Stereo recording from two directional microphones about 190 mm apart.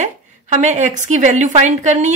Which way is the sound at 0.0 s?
40° right (ahead or behind).